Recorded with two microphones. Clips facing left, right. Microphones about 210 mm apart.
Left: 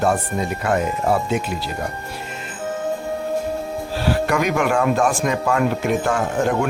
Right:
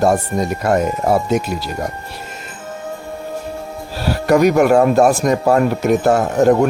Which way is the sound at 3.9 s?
40° right (ahead or behind).